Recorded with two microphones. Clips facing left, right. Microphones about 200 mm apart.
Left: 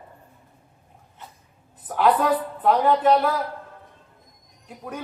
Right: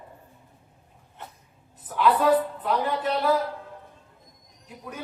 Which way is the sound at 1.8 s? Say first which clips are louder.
Left 2 dB; 55° left (ahead or behind).